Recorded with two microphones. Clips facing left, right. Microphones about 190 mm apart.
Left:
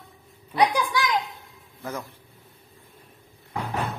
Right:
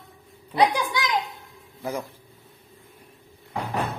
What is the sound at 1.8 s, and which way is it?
Speech, 15° right (ahead or behind).